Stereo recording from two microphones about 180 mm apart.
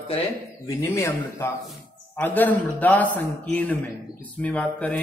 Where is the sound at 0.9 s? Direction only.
15° left (ahead or behind).